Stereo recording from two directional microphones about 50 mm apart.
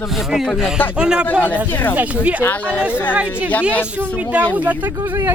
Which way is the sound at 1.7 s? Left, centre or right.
Left.